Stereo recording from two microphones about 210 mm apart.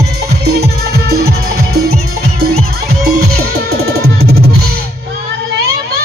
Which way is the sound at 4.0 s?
90° right.